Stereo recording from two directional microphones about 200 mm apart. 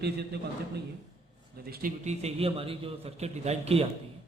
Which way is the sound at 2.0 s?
30° right (ahead or behind).